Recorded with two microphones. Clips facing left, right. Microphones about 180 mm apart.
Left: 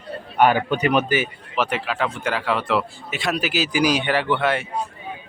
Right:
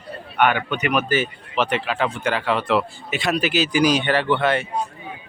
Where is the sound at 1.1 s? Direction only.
10° left (ahead or behind).